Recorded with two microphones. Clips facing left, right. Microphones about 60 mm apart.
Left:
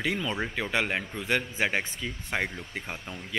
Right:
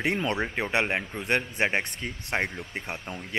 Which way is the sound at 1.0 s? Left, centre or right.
Centre.